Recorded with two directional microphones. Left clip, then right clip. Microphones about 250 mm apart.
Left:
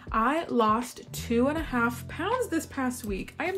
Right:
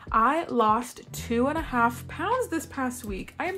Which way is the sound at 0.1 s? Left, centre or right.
Centre.